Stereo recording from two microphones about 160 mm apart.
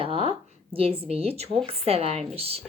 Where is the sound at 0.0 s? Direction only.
35° right (ahead or behind).